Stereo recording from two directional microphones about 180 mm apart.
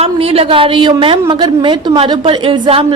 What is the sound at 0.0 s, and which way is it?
A woman's voice, 30° right (ahead or behind).